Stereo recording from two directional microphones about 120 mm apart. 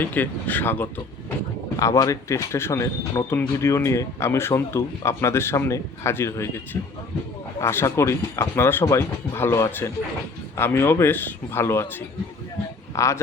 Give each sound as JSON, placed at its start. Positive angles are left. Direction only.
{"t": 0.0, "sound": "speech", "side_deg": 15}
{"t": 1.7, "sound": "speech", "side_deg": 30}
{"t": 7.6, "sound": "speech", "side_deg": 20}
{"t": 13.0, "sound": "speech", "side_deg": 25}